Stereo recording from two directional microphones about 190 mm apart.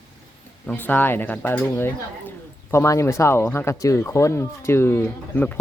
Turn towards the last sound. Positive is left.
turn(degrees=10)  # may be behind; listen again after turning